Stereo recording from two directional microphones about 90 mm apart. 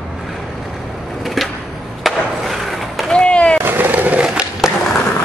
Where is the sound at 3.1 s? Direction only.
15° left (ahead or behind).